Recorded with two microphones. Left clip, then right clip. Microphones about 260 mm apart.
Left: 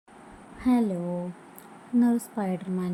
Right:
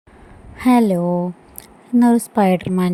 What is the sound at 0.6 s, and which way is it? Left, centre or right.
A woman's voice, right.